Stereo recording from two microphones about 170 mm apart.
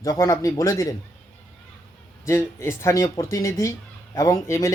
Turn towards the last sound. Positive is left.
turn(degrees=20)  # may be behind; listen again after turning